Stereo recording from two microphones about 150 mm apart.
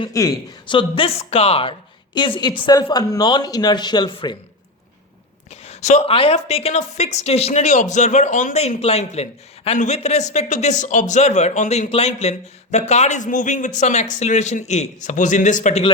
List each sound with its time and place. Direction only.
0.1 s speech: 20° left (ahead or behind)
0.7 s speech: 35° left (ahead or behind)
5.6 s a woman's voice: 45° left (ahead or behind)